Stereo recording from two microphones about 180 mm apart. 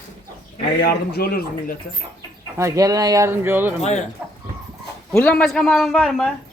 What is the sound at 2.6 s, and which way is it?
Speech, 20° right (ahead or behind).